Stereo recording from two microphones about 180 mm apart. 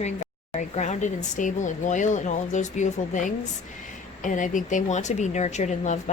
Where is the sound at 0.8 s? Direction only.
40° left (ahead or behind).